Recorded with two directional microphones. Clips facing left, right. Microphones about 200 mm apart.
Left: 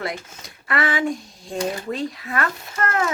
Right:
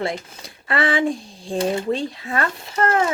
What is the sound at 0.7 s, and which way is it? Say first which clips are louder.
Speech: right 2 dB; 30° right (ahead or behind).